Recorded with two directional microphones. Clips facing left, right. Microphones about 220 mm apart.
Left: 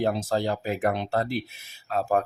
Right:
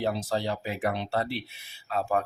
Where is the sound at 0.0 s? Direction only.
50° left (ahead or behind).